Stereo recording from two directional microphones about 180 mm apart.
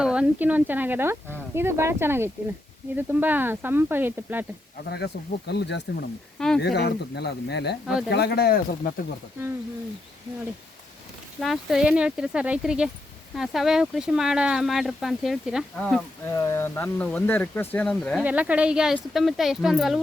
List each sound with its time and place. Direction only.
0.0 s speech: 5° right (ahead or behind)
4.9 s speech: 65° left (ahead or behind)
11.3 s speech: centre (ahead or behind)
16.3 s speech: 20° left (ahead or behind)
18.2 s speech: 10° right (ahead or behind)